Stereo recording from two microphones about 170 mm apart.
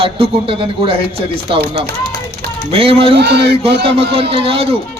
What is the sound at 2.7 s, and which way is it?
Speech, 30° right (ahead or behind).